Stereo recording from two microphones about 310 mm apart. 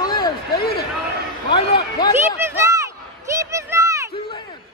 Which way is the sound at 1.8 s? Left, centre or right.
Centre.